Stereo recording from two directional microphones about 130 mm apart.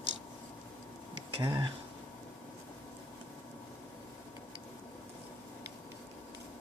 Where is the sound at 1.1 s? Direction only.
35° right (ahead or behind).